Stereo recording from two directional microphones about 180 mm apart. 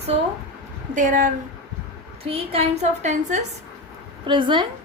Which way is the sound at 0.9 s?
45° right (ahead or behind).